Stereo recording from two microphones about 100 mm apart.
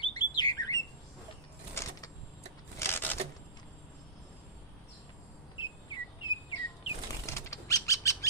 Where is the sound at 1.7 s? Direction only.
30° left (ahead or behind).